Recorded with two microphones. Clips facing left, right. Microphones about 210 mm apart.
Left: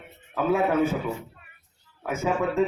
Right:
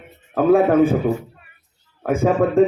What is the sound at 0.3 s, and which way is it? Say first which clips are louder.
A man's voice: right 9 dB; 50° right (ahead or behind).